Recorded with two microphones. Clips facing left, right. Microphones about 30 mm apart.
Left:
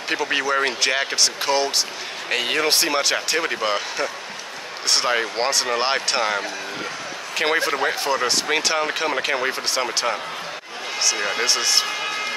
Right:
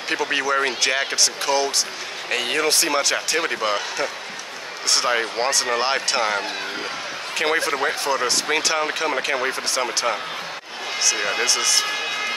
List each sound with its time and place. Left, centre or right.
0.1 s speech: centre
3.4 s speech: centre
7.3 s speech: centre
9.8 s speech: centre
11.4 s speech: left